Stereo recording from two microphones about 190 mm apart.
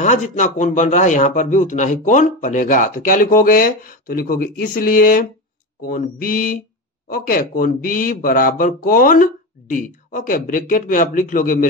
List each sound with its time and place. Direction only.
0.0 s speech: 40° left (ahead or behind)